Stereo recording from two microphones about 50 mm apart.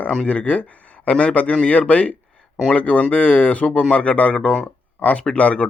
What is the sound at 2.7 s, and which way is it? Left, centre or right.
Speech, left.